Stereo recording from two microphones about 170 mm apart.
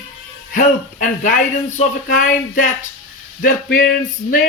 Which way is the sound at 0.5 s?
50° left (ahead or behind).